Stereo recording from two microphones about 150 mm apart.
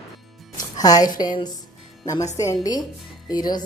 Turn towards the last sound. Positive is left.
turn(degrees=25)  # may be behind; listen again after turning